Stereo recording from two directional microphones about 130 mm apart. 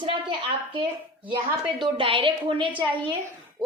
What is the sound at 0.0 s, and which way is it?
A woman's voice, 40° right (ahead or behind).